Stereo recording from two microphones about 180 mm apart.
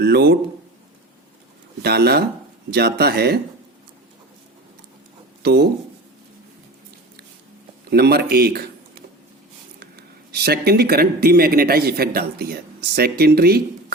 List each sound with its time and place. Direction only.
0.0 s speech: 65° right (ahead or behind)
1.8 s speech: 65° right (ahead or behind)
5.4 s writing: 65° right (ahead or behind)
7.9 s speech: 60° right (ahead or behind)